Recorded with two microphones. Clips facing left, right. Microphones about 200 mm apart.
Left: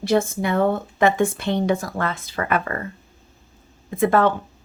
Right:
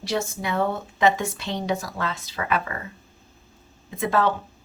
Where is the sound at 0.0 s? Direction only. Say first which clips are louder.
Left 7 dB; 55° left (ahead or behind).